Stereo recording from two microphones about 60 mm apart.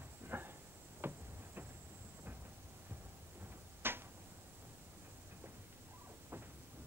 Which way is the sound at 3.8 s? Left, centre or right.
Right.